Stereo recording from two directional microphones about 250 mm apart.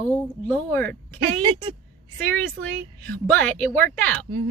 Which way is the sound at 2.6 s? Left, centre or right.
Centre.